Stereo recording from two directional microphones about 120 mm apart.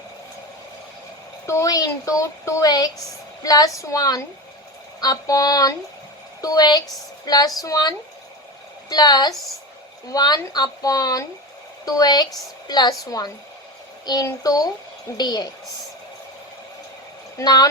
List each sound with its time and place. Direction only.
1.5 s speech: 30° left (ahead or behind)
17.3 s speech: 35° left (ahead or behind)